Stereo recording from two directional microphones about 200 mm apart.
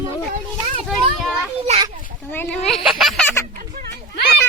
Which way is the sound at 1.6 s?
30° right (ahead or behind).